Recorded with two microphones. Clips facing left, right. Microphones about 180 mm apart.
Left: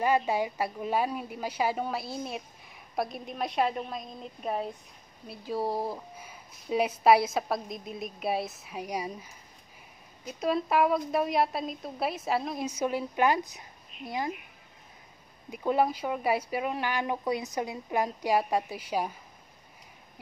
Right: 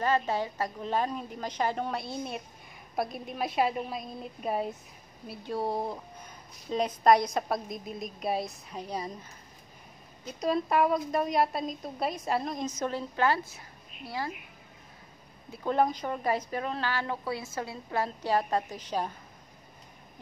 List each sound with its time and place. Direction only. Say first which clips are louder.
0.0 s a woman's voice: left 2 dB; 10° left (ahead or behind)
10.2 s a woman's voice: even; 5° left (ahead or behind); by 14.3 s 20° left (ahead or behind)
15.5 s speech: left 1 dB; 10° left (ahead or behind)